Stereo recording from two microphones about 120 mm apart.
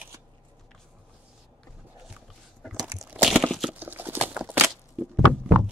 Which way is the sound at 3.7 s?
15° right (ahead or behind).